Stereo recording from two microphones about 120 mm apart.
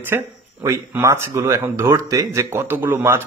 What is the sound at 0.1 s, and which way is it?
Speech, 20° right (ahead or behind).